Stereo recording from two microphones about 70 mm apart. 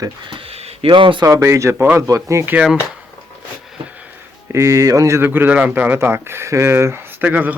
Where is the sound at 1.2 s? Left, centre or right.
Right.